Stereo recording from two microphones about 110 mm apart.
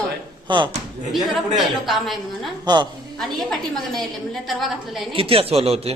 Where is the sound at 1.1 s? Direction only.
Centre (ahead or behind).